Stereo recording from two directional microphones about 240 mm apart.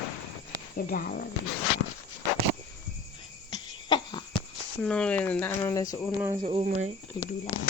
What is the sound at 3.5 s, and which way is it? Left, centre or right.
Cough, centre.